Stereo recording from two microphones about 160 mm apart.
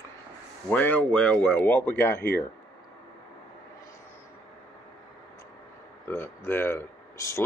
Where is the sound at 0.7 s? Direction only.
10° left (ahead or behind).